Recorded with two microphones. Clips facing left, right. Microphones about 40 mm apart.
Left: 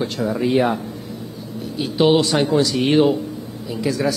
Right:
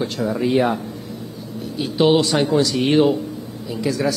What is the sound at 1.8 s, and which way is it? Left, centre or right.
Speech, centre.